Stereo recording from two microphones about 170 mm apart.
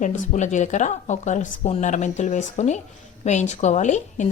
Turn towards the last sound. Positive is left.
turn(degrees=45)  # may be behind; listen again after turning